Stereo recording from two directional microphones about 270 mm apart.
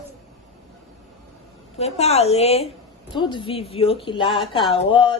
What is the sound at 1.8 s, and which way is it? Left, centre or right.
A woman's voice, left.